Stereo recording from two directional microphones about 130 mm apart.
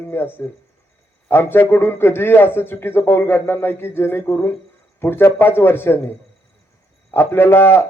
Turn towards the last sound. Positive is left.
turn(degrees=20)  # may be behind; listen again after turning